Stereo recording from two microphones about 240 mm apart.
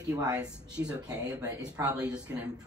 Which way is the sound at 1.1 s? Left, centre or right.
Centre.